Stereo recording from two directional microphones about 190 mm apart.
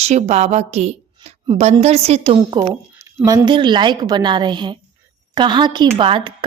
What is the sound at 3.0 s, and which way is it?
A woman's voice, 15° right (ahead or behind).